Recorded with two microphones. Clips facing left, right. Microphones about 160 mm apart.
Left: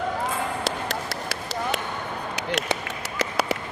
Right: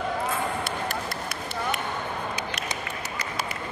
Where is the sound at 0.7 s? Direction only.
85° left.